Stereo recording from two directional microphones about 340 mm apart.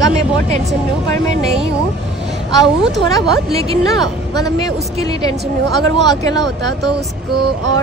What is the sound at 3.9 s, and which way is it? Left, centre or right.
Speech, centre.